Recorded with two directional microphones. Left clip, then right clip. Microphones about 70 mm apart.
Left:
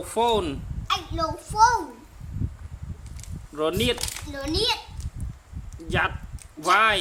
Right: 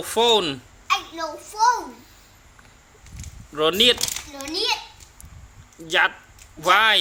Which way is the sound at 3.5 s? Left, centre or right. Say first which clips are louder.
Right 7 dB; right.